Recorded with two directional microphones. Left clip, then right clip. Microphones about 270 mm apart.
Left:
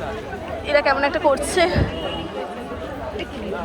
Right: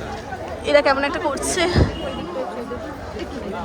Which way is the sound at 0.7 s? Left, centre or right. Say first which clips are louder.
Right 2 dB; centre.